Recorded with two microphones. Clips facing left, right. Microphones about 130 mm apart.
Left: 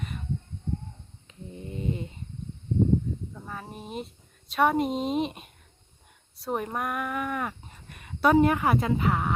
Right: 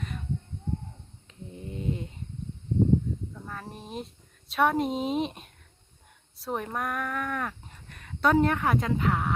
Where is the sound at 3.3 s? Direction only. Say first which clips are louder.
Left 1 dB; 5° left (ahead or behind).